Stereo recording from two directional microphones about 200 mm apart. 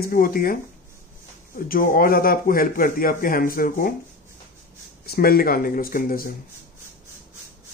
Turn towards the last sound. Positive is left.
turn(degrees=45)  # may be behind; listen again after turning